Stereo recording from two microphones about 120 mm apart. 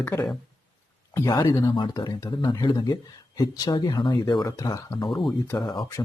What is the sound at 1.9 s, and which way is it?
Speech, 30° left (ahead or behind).